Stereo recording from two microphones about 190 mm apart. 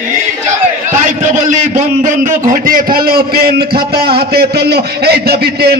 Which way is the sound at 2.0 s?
45° right (ahead or behind).